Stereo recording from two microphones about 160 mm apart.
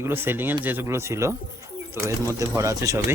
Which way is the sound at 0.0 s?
15° right (ahead or behind).